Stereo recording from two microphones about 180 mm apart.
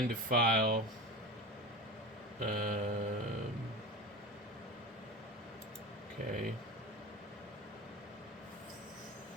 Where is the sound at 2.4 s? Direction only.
50° right (ahead or behind).